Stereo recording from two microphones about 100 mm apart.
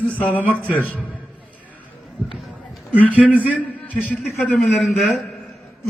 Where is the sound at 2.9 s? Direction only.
15° left (ahead or behind).